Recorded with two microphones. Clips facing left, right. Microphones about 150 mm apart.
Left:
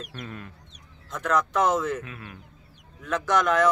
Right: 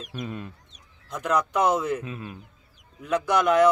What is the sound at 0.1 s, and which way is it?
Speech, 20° right (ahead or behind).